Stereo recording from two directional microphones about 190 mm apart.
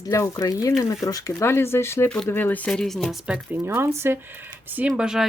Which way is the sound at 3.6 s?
15° right (ahead or behind).